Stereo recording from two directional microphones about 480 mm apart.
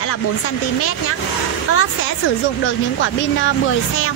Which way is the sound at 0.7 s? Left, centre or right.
Left.